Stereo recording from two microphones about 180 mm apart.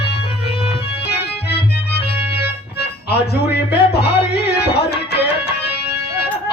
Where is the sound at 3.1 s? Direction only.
65° left (ahead or behind).